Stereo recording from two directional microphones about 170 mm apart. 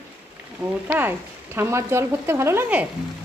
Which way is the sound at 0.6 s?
10° right (ahead or behind).